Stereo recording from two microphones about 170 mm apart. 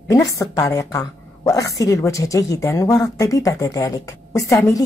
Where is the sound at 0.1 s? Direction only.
20° left (ahead or behind).